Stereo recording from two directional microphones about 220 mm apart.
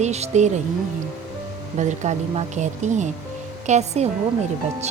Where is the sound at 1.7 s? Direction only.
30° right (ahead or behind).